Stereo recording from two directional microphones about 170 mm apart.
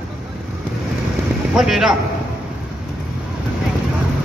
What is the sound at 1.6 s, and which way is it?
Speech, centre (ahead or behind).